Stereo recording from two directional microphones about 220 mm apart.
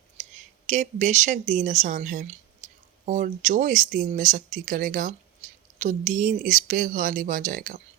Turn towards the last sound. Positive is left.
turn(degrees=-35)  # may be behind; listen again after turning